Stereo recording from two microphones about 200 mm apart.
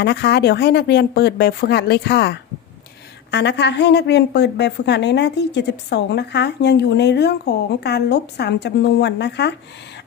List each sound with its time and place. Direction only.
0.0 s a woman's voice: 55° left (ahead or behind)